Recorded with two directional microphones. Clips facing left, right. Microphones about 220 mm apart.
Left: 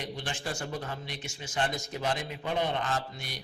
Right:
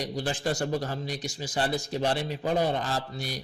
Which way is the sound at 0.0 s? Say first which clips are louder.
Right 7 dB; 35° right (ahead or behind).